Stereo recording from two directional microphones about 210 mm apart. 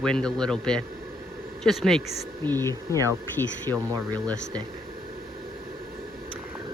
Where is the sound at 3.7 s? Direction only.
15° right (ahead or behind).